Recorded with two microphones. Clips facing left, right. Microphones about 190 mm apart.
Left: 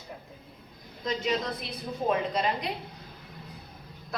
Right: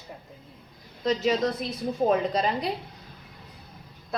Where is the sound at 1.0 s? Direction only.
40° right (ahead or behind).